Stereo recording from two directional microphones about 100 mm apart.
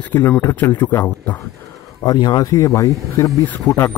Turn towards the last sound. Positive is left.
turn(degrees=30)  # may be behind; listen again after turning